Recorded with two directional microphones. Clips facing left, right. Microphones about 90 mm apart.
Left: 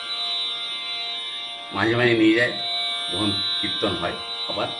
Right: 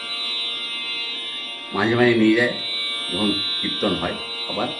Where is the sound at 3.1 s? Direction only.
30° left (ahead or behind).